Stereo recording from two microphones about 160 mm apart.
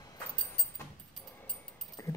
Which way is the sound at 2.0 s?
20° left (ahead or behind).